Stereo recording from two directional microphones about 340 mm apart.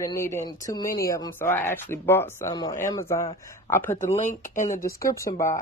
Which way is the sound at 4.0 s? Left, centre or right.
Left.